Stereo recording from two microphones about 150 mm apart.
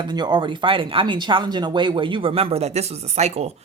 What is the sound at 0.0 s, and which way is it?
Speech, 30° right (ahead or behind).